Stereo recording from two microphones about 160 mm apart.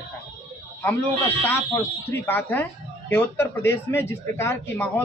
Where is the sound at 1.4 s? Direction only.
15° left (ahead or behind).